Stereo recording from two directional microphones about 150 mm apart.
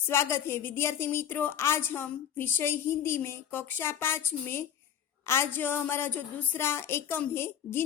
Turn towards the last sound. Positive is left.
turn(degrees=15)  # may be behind; listen again after turning